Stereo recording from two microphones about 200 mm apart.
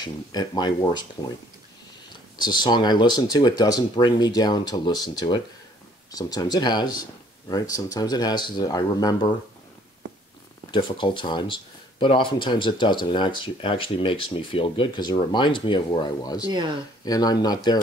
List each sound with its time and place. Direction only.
0.0 s speech: 20° left (ahead or behind)
2.3 s speech: 20° left (ahead or behind)
10.7 s speech: 25° left (ahead or behind)